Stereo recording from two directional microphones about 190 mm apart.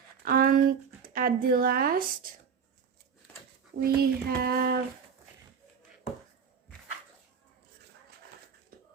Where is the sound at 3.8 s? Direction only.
55° right (ahead or behind).